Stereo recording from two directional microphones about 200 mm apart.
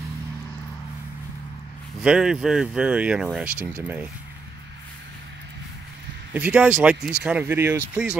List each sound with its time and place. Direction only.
2.0 s speech: 5° right (ahead or behind)
6.3 s speech: 10° right (ahead or behind)